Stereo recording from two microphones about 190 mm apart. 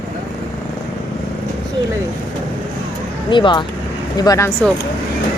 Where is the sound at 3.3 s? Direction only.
25° left (ahead or behind).